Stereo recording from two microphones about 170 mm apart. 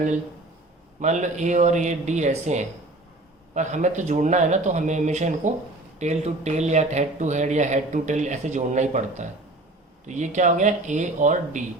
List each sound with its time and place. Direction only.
0.9 s speech: 45° right (ahead or behind)